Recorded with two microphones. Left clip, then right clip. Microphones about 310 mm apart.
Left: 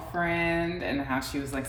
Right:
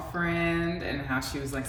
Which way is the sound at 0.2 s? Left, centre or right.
Left.